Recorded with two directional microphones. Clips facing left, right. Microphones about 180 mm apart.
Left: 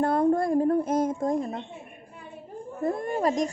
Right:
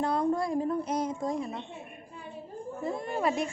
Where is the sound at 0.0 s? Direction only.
50° left (ahead or behind).